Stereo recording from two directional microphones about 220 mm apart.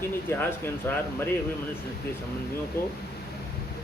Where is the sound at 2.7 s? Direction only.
45° left (ahead or behind).